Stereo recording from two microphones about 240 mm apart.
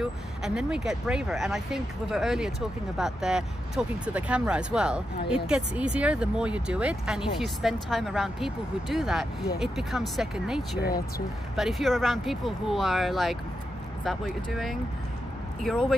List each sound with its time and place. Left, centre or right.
0.0 s speech: centre
10.8 s speech: left
11.5 s speech: centre